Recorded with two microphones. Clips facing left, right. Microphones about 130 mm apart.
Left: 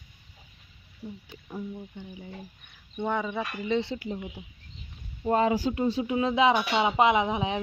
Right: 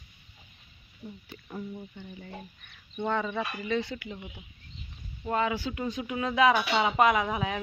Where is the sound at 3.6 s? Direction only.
25° left (ahead or behind).